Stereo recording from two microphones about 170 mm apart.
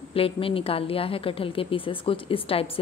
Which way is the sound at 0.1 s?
35° left (ahead or behind).